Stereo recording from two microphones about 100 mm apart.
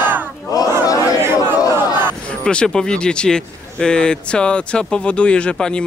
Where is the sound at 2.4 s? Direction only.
10° left (ahead or behind).